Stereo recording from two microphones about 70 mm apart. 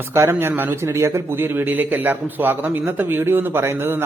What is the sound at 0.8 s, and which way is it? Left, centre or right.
A man's voice, right.